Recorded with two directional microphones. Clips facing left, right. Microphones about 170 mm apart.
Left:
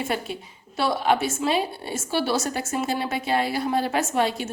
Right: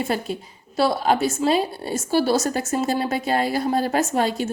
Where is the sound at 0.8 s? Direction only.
40° right (ahead or behind).